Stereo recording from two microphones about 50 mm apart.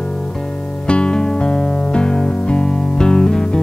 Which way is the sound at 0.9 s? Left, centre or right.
Centre.